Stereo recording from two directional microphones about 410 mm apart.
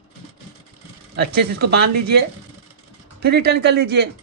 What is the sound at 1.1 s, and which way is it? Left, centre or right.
Speech, right.